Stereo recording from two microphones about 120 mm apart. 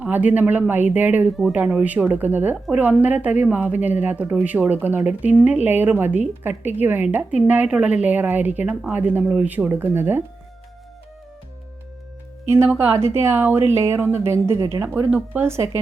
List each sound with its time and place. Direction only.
0.0 s a woman's voice: 15° right (ahead or behind)
12.5 s speech: 20° right (ahead or behind)